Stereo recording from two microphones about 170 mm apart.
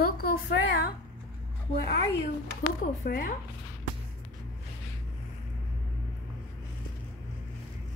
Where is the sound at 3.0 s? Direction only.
60° left (ahead or behind).